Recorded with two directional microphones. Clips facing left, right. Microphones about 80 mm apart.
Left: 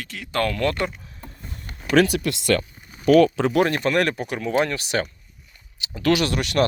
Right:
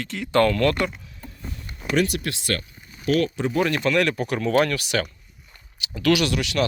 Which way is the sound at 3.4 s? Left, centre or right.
Left.